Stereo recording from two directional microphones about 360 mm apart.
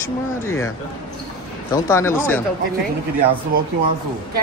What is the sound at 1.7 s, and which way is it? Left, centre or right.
Speech, centre.